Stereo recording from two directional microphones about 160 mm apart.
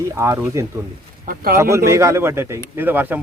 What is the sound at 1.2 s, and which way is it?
Speech, 65° right (ahead or behind).